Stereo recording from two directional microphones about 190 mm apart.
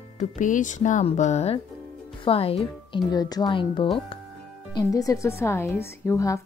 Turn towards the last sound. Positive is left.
turn(degrees=15)  # may be behind; listen again after turning